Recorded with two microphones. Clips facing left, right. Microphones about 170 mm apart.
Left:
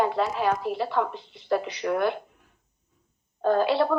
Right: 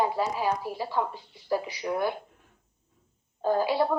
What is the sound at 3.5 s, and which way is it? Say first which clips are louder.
Speech: left 2 dB; 70° left (ahead or behind).